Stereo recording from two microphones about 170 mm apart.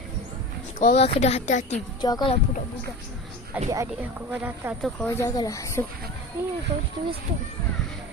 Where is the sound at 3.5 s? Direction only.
10° right (ahead or behind).